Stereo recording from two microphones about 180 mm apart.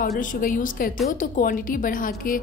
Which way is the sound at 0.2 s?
50° left (ahead or behind).